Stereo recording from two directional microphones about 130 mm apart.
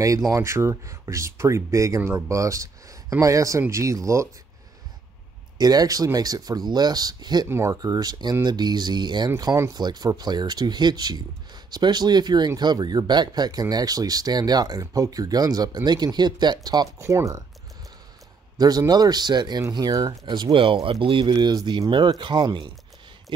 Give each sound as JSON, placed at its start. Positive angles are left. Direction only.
{"t": 0.0, "sound": "speech", "side_deg": -25}
{"t": 5.6, "sound": "speech", "side_deg": -30}
{"t": 7.4, "sound": "speech", "side_deg": -20}
{"t": 18.6, "sound": "speech", "side_deg": -30}